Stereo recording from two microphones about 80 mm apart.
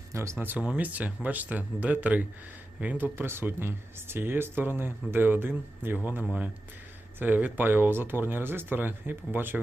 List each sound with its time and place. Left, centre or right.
0.1 s speech: right